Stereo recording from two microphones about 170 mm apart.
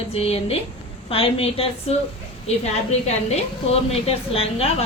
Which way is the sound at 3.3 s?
35° left (ahead or behind).